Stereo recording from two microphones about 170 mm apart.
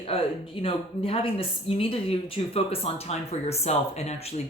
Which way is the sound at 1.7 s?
35° left (ahead or behind).